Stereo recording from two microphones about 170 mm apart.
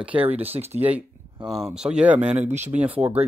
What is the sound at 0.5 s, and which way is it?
Speech, 35° right (ahead or behind).